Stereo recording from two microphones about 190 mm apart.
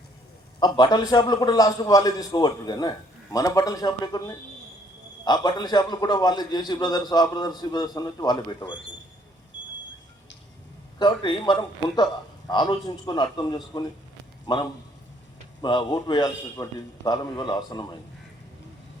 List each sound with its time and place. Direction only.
0.6 s a man's voice: 20° left (ahead or behind)
11.0 s a man's voice: 25° left (ahead or behind)